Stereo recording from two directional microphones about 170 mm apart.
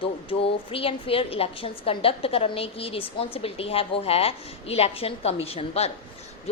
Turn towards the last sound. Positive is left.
turn(degrees=35)  # may be behind; listen again after turning